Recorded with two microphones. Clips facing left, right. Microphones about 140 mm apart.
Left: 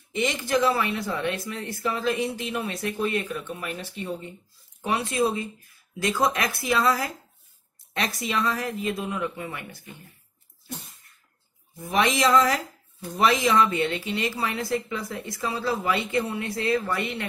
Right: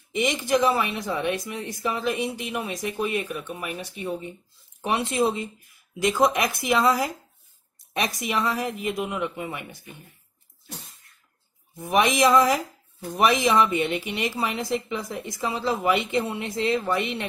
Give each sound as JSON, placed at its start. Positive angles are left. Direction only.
{"t": 0.1, "sound": "a woman's voice", "side_deg": -15}
{"t": 11.7, "sound": "a woman's voice", "side_deg": -20}